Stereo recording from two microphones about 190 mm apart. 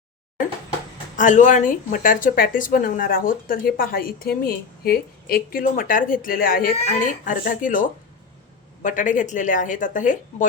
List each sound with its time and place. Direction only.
1.1 s a woman's voice: 40° left (ahead or behind)